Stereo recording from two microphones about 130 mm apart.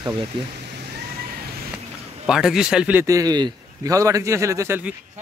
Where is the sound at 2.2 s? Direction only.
5° right (ahead or behind).